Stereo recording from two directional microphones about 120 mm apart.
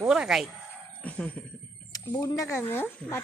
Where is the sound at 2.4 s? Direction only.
20° left (ahead or behind).